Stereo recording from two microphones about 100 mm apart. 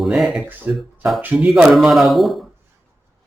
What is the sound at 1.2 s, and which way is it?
Speech, 20° right (ahead or behind).